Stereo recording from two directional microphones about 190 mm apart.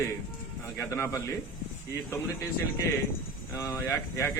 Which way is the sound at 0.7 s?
15° left (ahead or behind).